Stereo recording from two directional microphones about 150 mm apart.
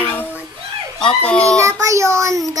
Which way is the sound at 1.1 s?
10° left (ahead or behind).